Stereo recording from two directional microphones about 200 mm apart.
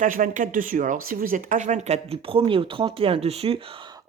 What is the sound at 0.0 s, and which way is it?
Speech, 40° right (ahead or behind).